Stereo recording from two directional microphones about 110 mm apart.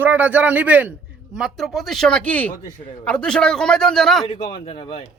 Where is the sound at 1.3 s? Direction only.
Centre (ahead or behind).